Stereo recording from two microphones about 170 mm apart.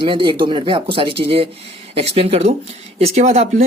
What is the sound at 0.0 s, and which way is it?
Speech, 30° right (ahead or behind).